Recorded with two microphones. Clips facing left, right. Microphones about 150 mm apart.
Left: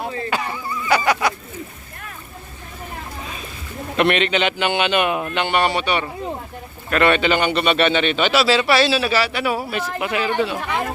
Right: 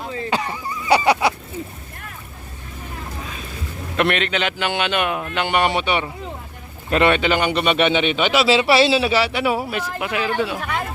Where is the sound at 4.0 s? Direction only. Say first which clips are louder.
Left 2 dB; centre (ahead or behind).